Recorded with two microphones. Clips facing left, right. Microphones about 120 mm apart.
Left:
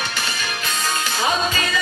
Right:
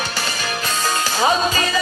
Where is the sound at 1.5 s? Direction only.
35° right (ahead or behind).